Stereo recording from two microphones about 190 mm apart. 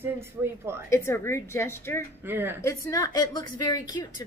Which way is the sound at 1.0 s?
15° left (ahead or behind).